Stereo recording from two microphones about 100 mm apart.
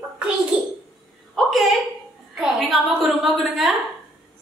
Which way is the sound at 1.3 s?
Centre (ahead or behind).